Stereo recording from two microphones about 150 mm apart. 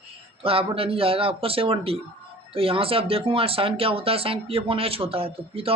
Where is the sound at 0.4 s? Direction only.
40° right (ahead or behind).